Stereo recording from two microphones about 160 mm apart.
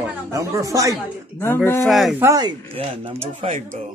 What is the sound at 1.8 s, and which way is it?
Speech, centre (ahead or behind).